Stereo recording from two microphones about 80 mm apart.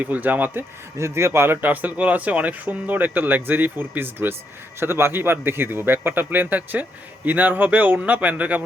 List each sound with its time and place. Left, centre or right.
0.0 s speech: right
0.9 s speech: right; by 8.6 s centre